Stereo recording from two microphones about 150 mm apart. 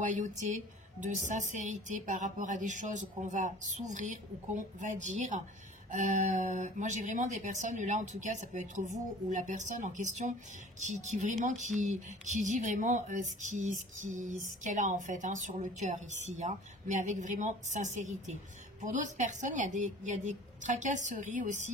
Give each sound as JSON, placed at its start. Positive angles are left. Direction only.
{"t": 0.0, "sound": "speech", "side_deg": -50}